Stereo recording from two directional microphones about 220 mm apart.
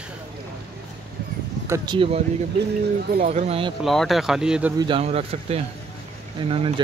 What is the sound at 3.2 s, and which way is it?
Speech, 30° right (ahead or behind).